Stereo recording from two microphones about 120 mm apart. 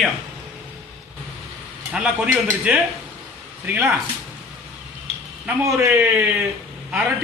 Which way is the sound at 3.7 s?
20° right (ahead or behind).